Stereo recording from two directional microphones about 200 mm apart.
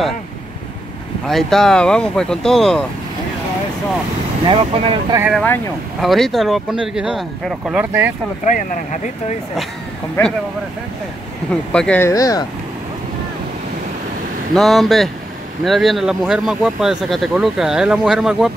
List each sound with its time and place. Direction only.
1.2 s speech: centre (ahead or behind)
4.5 s speech: 30° right (ahead or behind)
5.4 s speech: 5° left (ahead or behind)
8.5 s speech: 40° left (ahead or behind)
11.7 s speech: 5° left (ahead or behind)
14.5 s speech: centre (ahead or behind)